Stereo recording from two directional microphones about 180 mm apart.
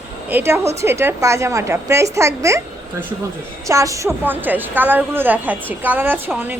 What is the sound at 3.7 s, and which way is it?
A woman's voice, 15° right (ahead or behind).